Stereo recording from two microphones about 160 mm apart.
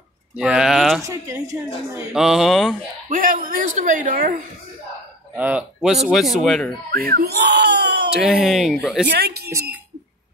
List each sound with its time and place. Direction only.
0.4 s speech: 5° right (ahead or behind)
1.0 s a woman's voice: 20° right (ahead or behind)
2.1 s speech: centre (ahead or behind)
3.1 s speech: 60° right (ahead or behind)
5.3 s speech: 10° right (ahead or behind)
7.0 s a sound: 70° right (ahead or behind); by 8.1 s 90° right
8.1 s speech: 5° right (ahead or behind)
9.0 s speech: 85° right
9.5 s a woman's voice: 20° right (ahead or behind)